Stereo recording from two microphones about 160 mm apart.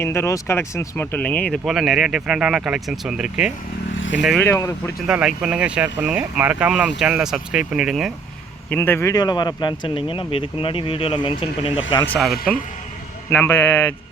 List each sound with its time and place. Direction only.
0.0 s speech: 15° left (ahead or behind); by 4.4 s centre (ahead or behind)
4.4 s speech: 15° left (ahead or behind)
5.0 s speech: 5° right (ahead or behind)
8.7 s speech: 15° left (ahead or behind); by 11.9 s 35° left (ahead or behind)
12.0 s speech: 5° left (ahead or behind)